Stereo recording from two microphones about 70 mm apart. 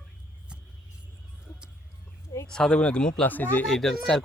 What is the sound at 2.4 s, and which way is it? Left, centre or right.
Speech, centre.